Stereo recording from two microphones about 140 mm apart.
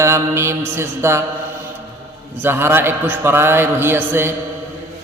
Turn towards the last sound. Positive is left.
turn(degrees=-15)  # may be behind; listen again after turning